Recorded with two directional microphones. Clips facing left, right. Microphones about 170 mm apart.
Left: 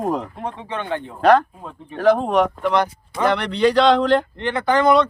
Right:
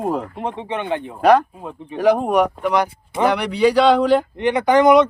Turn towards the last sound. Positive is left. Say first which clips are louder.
# right 3 dB
turn(degrees=-15)  # may be behind; listen again after turning